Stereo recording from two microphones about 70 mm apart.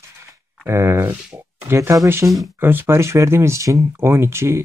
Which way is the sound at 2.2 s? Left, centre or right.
Right.